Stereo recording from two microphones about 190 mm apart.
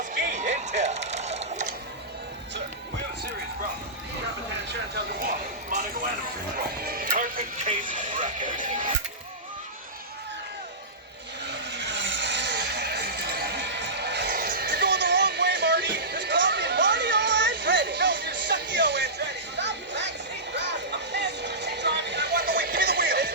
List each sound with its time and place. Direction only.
0.0 s music: 40° right (ahead or behind)
6.8 s music: 50° right (ahead or behind)
11.4 s vehicle: 65° right (ahead or behind)